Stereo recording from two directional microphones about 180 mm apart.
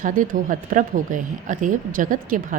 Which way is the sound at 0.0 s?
50° right (ahead or behind).